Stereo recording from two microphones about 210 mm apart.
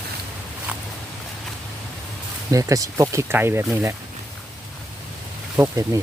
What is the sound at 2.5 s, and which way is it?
Speech, 15° right (ahead or behind).